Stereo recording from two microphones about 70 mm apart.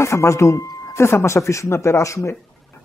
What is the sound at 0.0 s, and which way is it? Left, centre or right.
Speech, left.